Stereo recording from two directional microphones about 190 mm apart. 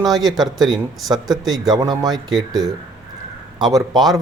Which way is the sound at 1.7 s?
20° right (ahead or behind).